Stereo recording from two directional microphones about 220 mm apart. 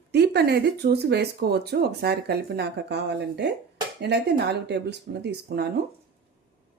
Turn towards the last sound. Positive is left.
turn(degrees=-45)  # may be behind; listen again after turning